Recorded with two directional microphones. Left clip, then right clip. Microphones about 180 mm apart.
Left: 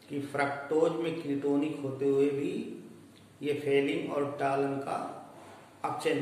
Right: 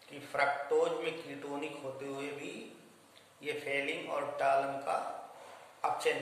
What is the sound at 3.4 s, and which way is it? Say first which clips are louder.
A man's voice: left 7 dB; 15° right (ahead or behind).